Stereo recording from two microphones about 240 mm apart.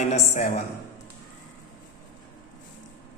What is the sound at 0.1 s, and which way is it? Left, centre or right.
Speech, left.